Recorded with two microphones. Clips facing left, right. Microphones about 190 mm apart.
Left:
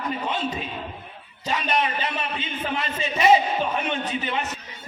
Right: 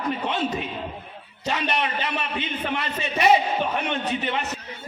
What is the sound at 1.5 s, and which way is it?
A man's voice, 65° right (ahead or behind).